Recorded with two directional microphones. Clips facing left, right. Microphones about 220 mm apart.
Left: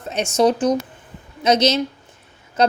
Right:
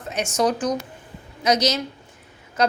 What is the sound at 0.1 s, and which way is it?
A woman's voice, 25° left (ahead or behind).